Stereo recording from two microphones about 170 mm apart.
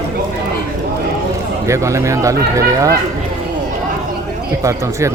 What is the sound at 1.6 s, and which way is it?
Speech, 15° right (ahead or behind).